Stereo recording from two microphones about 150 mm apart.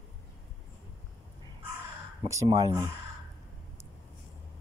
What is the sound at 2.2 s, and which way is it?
Speech, 20° right (ahead or behind).